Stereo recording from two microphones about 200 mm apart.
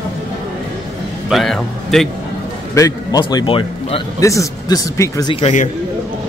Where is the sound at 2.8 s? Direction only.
20° left (ahead or behind).